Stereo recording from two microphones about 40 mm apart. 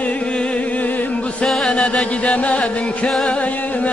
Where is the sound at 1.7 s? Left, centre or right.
Left.